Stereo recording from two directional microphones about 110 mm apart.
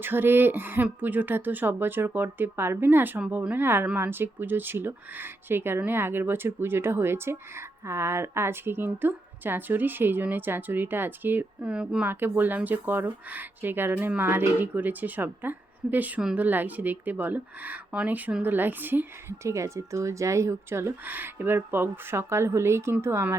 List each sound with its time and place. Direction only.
0.0 s speech: 20° right (ahead or behind)
12.0 s a woman's voice: 20° right (ahead or behind)